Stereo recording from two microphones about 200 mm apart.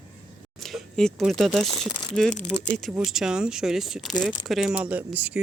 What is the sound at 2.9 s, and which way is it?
Speech, 5° right (ahead or behind).